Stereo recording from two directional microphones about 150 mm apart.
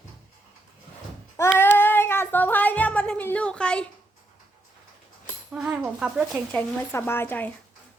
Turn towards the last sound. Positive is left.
turn(degrees=10)  # may be behind; listen again after turning